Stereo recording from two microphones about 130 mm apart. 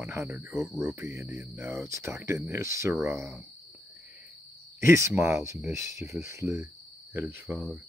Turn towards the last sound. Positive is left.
turn(degrees=-5)  # may be behind; listen again after turning